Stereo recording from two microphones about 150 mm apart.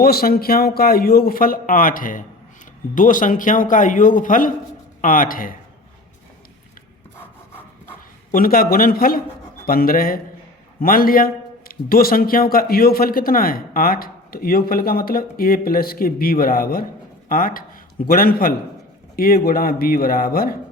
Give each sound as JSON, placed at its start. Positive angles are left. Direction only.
{"t": 0.0, "sound": "a man's voice", "side_deg": 85}
{"t": 8.3, "sound": "speech", "side_deg": 75}